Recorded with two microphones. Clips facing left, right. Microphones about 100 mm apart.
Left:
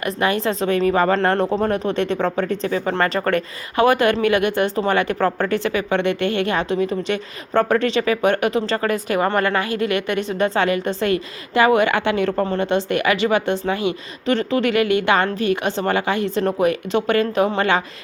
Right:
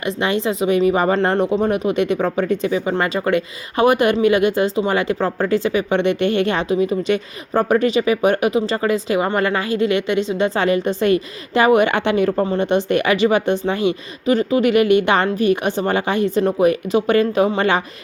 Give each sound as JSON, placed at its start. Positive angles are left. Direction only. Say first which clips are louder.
{"t": 0.0, "sound": "a woman's voice", "louder": "even", "side_deg": -20}
{"t": 6.8, "sound": "speech", "louder": "right 3 dB", "side_deg": -10}
{"t": 14.3, "sound": "a woman's voice", "louder": "right 3 dB", "side_deg": -10}